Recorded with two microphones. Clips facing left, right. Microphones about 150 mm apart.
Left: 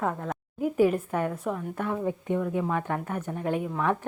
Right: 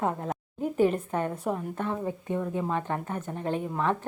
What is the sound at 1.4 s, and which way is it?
Speech, 10° right (ahead or behind).